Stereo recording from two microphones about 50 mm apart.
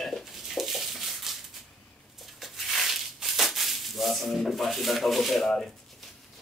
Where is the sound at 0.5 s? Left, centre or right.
Centre.